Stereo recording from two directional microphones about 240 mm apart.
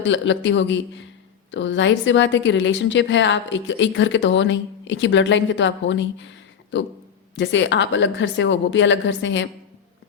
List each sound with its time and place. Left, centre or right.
0.0 s a woman's voice: left